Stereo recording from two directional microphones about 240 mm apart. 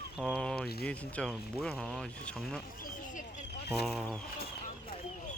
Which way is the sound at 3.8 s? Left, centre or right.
Centre.